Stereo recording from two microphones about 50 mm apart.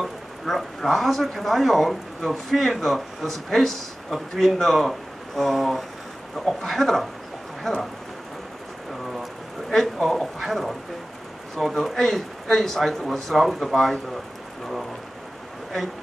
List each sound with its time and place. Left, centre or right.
0.0 s speech: centre
9.7 s speech: centre